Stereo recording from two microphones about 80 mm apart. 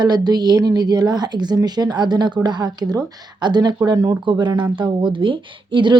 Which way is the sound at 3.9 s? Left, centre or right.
Right.